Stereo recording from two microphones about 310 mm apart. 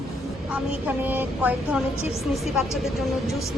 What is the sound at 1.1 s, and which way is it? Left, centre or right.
Speech, centre.